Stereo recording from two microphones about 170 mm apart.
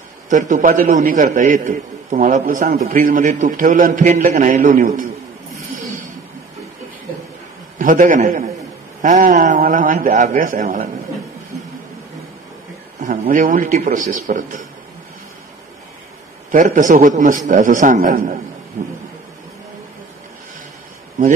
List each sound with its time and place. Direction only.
0.3 s a man's voice: 50° right (ahead or behind)
7.8 s a man's voice: 50° right (ahead or behind)
13.0 s a man's voice: 50° right (ahead or behind)
16.5 s a man's voice: 50° right (ahead or behind)